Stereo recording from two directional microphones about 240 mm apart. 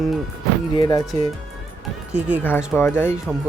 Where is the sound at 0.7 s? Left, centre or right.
Centre.